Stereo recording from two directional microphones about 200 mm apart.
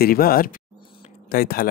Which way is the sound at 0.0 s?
50° left (ahead or behind).